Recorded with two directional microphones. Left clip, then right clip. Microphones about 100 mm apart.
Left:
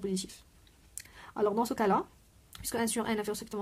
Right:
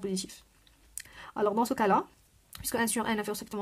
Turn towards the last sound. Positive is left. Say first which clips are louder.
# right 1 dB
turn(degrees=-30)  # may be behind; listen again after turning